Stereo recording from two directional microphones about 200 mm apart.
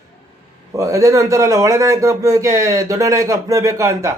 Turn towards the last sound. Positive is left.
turn(degrees=-15)  # may be behind; listen again after turning